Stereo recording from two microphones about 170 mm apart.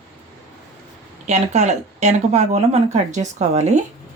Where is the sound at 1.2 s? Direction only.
40° right (ahead or behind).